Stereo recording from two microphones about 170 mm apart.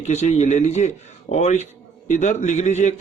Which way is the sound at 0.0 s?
40° left (ahead or behind).